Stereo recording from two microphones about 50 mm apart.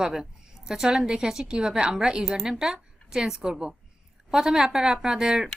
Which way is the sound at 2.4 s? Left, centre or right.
Centre.